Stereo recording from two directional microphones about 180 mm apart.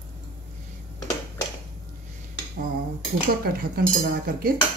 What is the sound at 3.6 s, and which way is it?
Speech, 55° right (ahead or behind).